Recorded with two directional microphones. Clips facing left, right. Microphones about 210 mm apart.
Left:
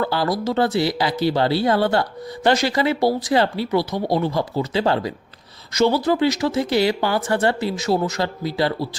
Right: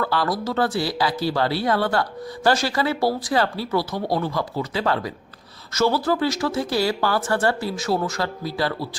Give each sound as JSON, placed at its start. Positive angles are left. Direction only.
{"t": 0.0, "sound": "speech", "side_deg": 25}